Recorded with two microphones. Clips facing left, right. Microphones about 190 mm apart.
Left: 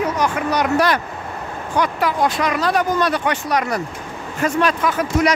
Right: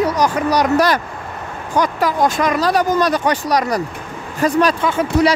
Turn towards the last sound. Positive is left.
turn(degrees=-30)  # may be behind; listen again after turning